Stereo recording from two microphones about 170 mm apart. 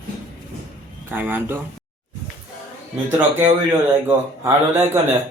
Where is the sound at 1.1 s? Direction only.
10° right (ahead or behind).